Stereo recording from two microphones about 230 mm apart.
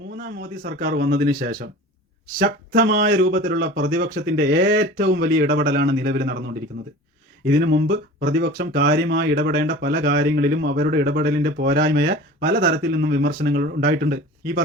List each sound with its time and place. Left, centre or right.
0.2 s speech: right